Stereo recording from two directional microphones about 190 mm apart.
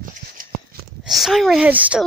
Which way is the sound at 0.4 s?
45° right (ahead or behind).